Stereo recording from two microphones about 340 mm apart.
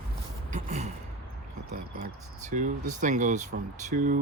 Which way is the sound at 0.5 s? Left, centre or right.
Centre.